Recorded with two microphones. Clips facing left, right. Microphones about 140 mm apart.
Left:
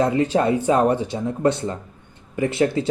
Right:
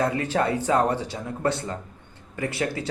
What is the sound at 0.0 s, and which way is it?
Speech, 25° left (ahead or behind).